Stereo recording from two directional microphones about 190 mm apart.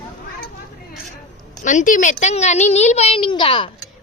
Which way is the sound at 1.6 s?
40° left (ahead or behind).